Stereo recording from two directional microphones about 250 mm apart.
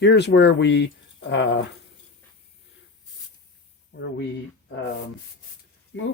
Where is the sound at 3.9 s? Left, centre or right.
Left.